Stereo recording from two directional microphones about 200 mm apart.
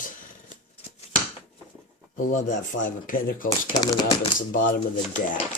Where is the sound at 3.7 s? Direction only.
20° left (ahead or behind).